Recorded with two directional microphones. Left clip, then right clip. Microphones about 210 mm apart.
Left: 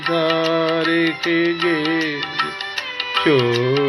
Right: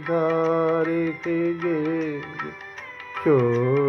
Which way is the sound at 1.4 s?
55° left (ahead or behind).